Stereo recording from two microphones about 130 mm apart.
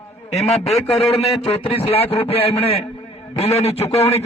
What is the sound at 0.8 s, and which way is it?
A man's voice, 50° left (ahead or behind).